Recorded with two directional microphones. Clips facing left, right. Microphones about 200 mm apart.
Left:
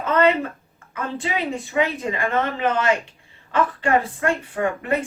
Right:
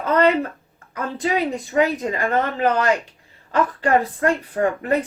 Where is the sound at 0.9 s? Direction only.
40° right (ahead or behind).